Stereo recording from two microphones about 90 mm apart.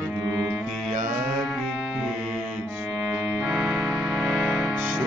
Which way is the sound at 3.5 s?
5° right (ahead or behind).